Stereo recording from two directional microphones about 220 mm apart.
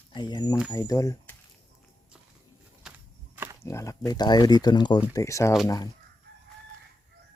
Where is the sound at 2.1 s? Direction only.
5° right (ahead or behind).